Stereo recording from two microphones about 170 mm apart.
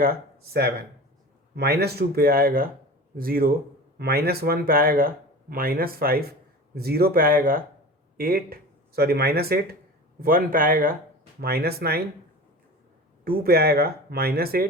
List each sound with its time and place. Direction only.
0.0 s speech: 65° right (ahead or behind)
13.2 s speech: 60° right (ahead or behind)